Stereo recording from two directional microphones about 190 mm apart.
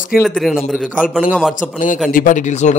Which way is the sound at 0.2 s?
5° right (ahead or behind).